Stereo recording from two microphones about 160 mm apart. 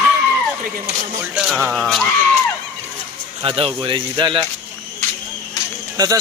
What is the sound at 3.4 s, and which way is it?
Speech, 35° right (ahead or behind).